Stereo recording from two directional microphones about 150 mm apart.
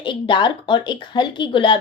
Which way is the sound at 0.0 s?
35° left (ahead or behind).